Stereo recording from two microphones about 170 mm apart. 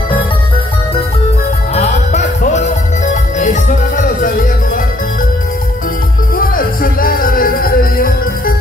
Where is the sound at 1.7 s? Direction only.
40° left (ahead or behind).